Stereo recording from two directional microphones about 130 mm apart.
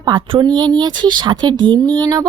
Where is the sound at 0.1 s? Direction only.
35° right (ahead or behind).